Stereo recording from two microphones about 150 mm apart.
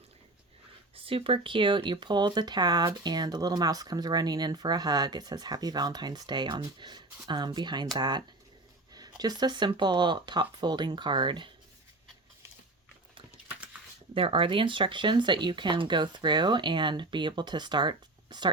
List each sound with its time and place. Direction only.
0.9 s speech: 40° right (ahead or behind)
14.1 s speech: 35° right (ahead or behind)